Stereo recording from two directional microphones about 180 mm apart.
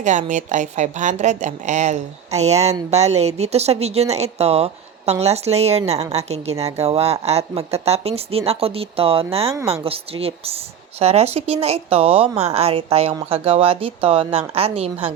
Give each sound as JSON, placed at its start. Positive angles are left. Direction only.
{"t": 0.0, "sound": "speech", "side_deg": -40}